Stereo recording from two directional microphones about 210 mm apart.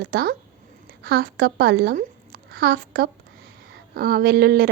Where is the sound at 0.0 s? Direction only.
45° right (ahead or behind).